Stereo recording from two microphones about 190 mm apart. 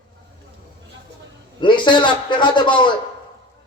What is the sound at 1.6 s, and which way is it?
Speech, 25° left (ahead or behind).